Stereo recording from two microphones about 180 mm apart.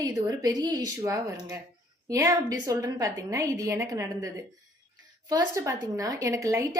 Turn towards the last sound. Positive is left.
turn(degrees=-20)  # may be behind; listen again after turning